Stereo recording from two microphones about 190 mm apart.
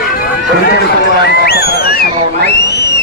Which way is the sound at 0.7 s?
60° left (ahead or behind).